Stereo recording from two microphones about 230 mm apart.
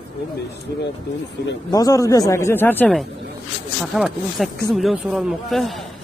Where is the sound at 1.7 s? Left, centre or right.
Centre.